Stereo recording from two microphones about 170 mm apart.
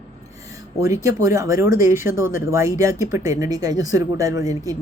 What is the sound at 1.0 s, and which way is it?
A woman's voice, 20° right (ahead or behind).